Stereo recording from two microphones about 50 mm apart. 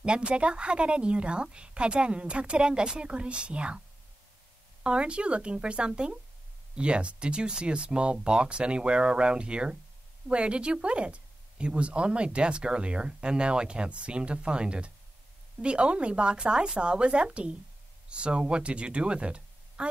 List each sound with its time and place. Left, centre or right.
0.0 s speech: right
4.8 s speech: right